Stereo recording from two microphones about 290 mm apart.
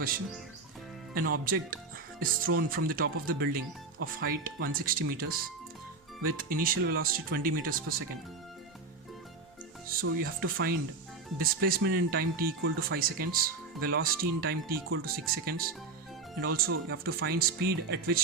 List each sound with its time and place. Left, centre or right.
1.5 s speech: right
9.9 s speech: right